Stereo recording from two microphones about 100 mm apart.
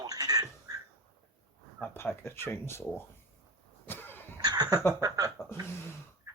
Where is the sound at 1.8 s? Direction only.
20° left (ahead or behind).